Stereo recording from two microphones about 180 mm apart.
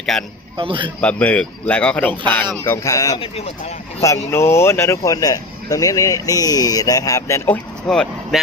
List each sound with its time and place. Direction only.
0.0 s a man's voice: 5° left (ahead or behind)
0.5 s a man's voice: 30° right (ahead or behind)
1.0 s speech: 10° left (ahead or behind)
3.2 s speech: 35° left (ahead or behind)
4.0 s speech: 15° left (ahead or behind)